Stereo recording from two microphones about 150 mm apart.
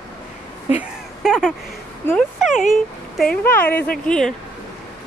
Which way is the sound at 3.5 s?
10° left (ahead or behind).